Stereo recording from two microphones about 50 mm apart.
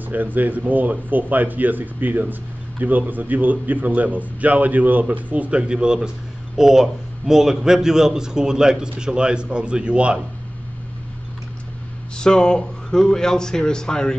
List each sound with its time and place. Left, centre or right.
0.0 s a man's voice: right
12.2 s speech: centre